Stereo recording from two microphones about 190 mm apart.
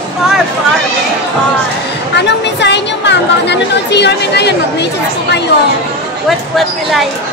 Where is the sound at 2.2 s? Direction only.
65° left (ahead or behind).